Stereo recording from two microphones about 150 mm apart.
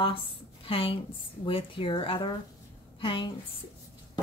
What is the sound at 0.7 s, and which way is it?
A woman's voice, 35° left (ahead or behind).